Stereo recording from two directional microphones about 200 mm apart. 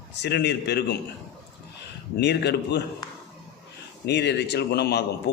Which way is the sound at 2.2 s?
55° left (ahead or behind).